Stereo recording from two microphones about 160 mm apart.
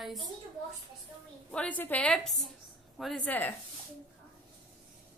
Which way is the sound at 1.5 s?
10° left (ahead or behind).